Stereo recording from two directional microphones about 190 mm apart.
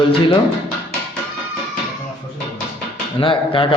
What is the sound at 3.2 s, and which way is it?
Speech, 25° left (ahead or behind).